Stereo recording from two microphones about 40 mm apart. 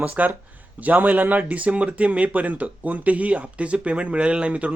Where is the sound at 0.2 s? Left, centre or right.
Right.